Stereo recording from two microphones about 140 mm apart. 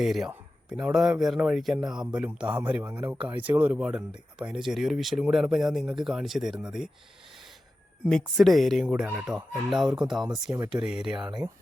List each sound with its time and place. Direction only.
0.0 s speech: centre (ahead or behind)
8.0 s speech: centre (ahead or behind)
8.9 s speech: 10° right (ahead or behind)
11.3 s speech: 25° right (ahead or behind)